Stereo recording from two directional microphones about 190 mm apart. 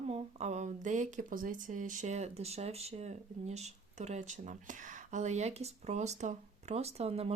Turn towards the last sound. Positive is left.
turn(degrees=-30)  # may be behind; listen again after turning